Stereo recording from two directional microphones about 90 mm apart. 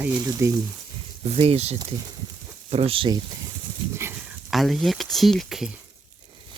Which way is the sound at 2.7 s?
90° right.